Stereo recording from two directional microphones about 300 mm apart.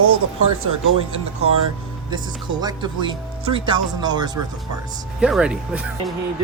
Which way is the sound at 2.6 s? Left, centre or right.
Centre.